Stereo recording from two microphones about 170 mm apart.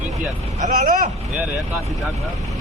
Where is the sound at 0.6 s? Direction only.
50° right (ahead or behind).